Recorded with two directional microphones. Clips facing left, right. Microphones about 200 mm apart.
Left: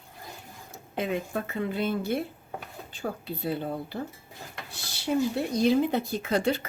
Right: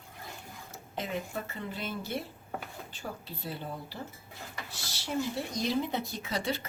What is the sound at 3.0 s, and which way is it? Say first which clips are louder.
Speech: left 9 dB; 55° left (ahead or behind).